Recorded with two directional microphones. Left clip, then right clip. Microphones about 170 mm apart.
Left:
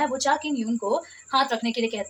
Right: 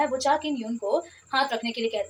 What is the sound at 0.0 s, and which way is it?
A woman's voice, 30° left (ahead or behind).